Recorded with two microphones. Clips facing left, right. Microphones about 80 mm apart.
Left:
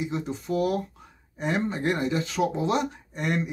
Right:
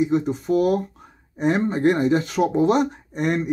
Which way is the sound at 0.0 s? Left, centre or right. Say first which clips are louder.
Right 10 dB; right.